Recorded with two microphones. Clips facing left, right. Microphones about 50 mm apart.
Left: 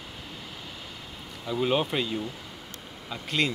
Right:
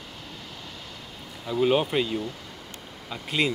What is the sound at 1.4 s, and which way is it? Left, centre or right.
Speech, centre.